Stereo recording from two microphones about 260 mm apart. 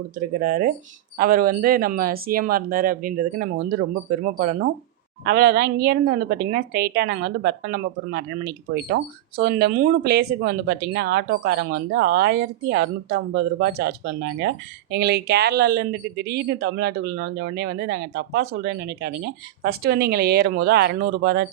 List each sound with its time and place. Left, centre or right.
0.3 s speech: right